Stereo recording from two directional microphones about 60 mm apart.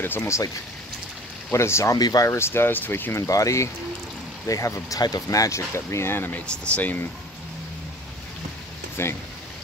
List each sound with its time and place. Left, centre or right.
0.0 s speech: left
1.5 s speech: left
1.9 s speech: left
2.3 s speech: left
3.3 s speech: left
5.7 s speech: left
6.4 s speech: centre
6.8 s speech: left
9.0 s speech: left